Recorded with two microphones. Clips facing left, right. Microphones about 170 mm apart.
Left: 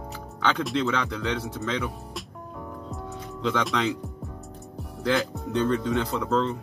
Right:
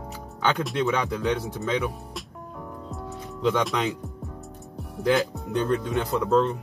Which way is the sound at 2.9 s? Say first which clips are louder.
Right 1 dB; centre (ahead or behind).